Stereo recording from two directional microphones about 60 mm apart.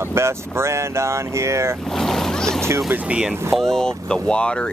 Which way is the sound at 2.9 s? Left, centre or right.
Right.